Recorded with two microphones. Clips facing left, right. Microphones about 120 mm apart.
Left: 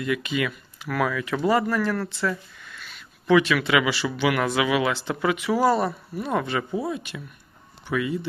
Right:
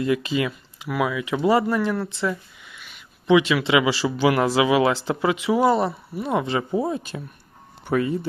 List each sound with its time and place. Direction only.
0.0 s speech: 30° right (ahead or behind)
0.8 s speech: 15° right (ahead or behind); by 8.3 s 40° right (ahead or behind)